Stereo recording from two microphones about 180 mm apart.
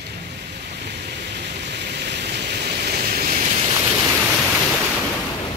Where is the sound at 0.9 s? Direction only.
70° right (ahead or behind); by 3.5 s 55° right (ahead or behind).